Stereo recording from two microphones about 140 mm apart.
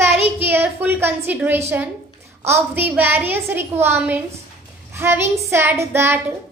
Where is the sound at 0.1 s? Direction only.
15° right (ahead or behind).